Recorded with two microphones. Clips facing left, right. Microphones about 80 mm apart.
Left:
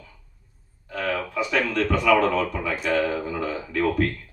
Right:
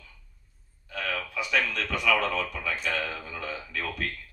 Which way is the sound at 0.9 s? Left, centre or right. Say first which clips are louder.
Left 6 dB; left.